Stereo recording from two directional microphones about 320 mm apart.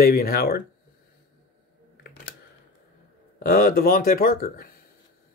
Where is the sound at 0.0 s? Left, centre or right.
Left.